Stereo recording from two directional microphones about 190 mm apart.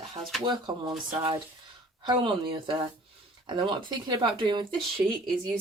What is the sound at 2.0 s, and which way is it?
Speech, 25° right (ahead or behind).